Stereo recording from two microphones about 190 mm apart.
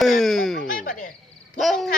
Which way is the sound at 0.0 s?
Centre (ahead or behind).